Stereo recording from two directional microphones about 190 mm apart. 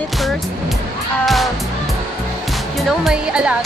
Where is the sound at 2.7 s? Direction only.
5° right (ahead or behind).